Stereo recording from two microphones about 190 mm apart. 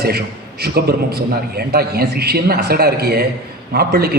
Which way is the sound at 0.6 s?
55° right (ahead or behind).